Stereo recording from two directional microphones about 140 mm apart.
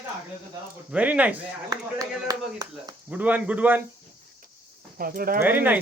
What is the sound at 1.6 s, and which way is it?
Speech, 25° right (ahead or behind).